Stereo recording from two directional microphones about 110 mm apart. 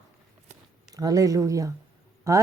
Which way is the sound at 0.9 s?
35° right (ahead or behind).